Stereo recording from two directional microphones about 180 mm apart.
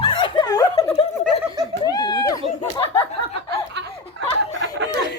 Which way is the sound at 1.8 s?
20° left (ahead or behind).